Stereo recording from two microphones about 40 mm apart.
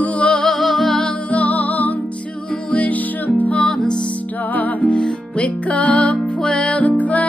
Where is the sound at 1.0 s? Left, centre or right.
Left.